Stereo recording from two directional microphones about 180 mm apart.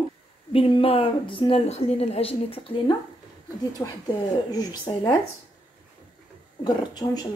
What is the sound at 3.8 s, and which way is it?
Speech, 10° left (ahead or behind).